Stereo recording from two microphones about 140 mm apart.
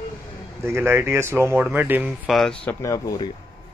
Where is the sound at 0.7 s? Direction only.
15° right (ahead or behind).